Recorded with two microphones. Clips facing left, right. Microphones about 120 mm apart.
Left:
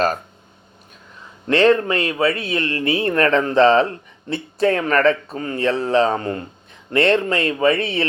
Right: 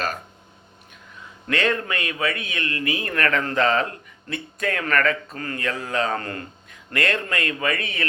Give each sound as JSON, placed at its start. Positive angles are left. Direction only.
{"t": 1.5, "sound": "speech", "side_deg": 30}